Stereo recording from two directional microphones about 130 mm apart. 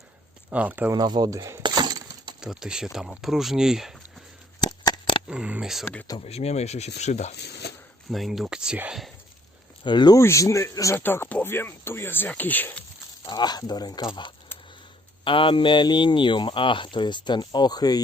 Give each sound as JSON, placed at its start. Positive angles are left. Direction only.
{"t": 0.5, "sound": "speech", "side_deg": -10}
{"t": 0.9, "sound": "speech", "side_deg": -30}
{"t": 1.6, "sound": "breaking", "side_deg": -35}
{"t": 2.4, "sound": "speech", "side_deg": -5}
{"t": 4.6, "sound": "a sound", "side_deg": 35}
{"t": 5.3, "sound": "speech", "side_deg": -5}
{"t": 6.1, "sound": "speech", "side_deg": 50}
{"t": 8.1, "sound": "speech", "side_deg": 0}
{"t": 9.8, "sound": "speech", "side_deg": 35}
{"t": 10.2, "sound": "speech", "side_deg": 20}
{"t": 13.2, "sound": "speech", "side_deg": 30}